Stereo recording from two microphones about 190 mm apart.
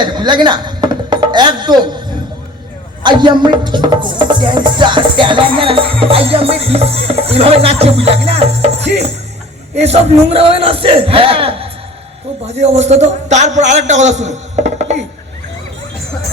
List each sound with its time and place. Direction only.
0.0 s music: 25° right (ahead or behind)
3.0 s a man's voice: 25° right (ahead or behind)